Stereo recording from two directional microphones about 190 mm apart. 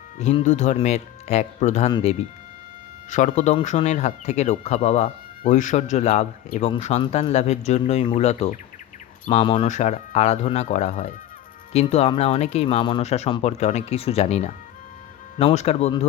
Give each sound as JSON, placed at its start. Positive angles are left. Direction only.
{"t": 0.2, "sound": "speech", "side_deg": 35}
{"t": 3.1, "sound": "speech", "side_deg": 40}